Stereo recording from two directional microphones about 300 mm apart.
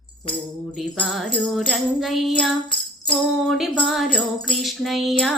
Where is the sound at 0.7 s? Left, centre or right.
Centre.